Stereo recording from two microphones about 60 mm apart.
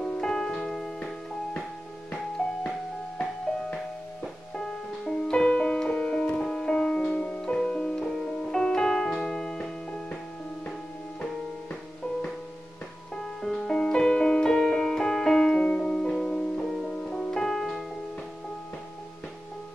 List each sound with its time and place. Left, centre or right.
0.0 s music: centre
0.9 s music: centre
4.2 s music: centre
13.1 s music: centre
16.7 s music: centre